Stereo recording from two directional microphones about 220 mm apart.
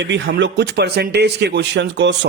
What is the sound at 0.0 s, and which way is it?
Speech, 55° right (ahead or behind).